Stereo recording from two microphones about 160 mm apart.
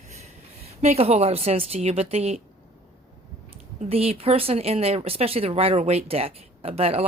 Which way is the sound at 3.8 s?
40° right (ahead or behind).